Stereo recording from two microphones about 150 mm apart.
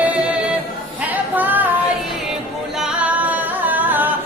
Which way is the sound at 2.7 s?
5° right (ahead or behind).